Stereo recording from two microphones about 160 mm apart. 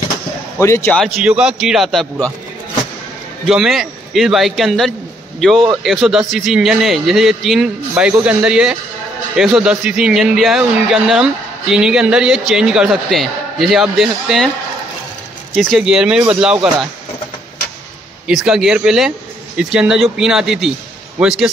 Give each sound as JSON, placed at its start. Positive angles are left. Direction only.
{"t": 0.6, "sound": "speech", "side_deg": 15}
{"t": 0.9, "sound": "a man's voice", "side_deg": 0}
{"t": 3.4, "sound": "a man's voice", "side_deg": 0}
{"t": 15.5, "sound": "a man's voice", "side_deg": 0}
{"t": 18.2, "sound": "a man's voice", "side_deg": -5}